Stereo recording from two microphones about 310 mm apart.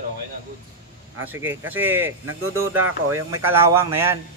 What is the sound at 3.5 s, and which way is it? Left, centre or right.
Speech, centre.